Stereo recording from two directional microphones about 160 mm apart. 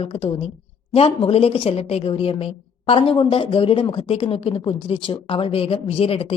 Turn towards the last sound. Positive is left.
turn(degrees=35)  # may be behind; listen again after turning